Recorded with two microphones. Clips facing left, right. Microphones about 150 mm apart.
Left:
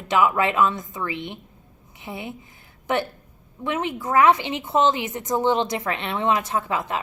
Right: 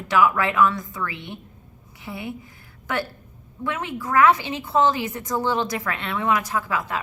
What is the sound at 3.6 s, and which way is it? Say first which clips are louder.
Speech: left 2 dB; 20° left (ahead or behind).